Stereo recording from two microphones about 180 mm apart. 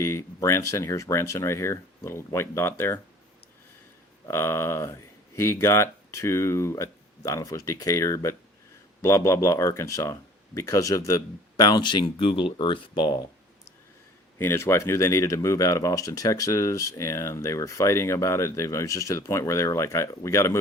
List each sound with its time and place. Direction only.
0.0 s speech: 15° left (ahead or behind)
4.3 s speech: 15° left (ahead or behind)
14.3 s speech: 15° left (ahead or behind)